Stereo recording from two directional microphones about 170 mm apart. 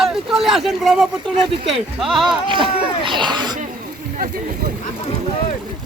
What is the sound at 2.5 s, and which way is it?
Speech, 30° right (ahead or behind).